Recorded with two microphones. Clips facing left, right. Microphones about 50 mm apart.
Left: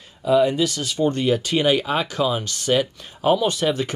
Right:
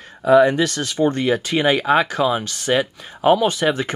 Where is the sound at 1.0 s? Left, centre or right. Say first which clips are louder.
Right 2 dB; right.